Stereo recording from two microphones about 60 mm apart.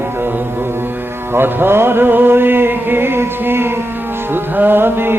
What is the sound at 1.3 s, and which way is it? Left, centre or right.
Music, right.